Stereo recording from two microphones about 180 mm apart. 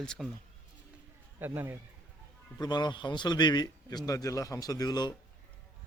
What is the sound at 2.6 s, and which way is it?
A man's voice, 25° left (ahead or behind).